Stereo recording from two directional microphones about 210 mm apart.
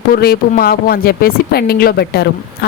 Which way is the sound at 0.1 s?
45° left (ahead or behind).